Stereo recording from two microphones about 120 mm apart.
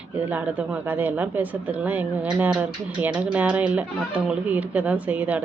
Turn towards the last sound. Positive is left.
turn(degrees=-10)  # may be behind; listen again after turning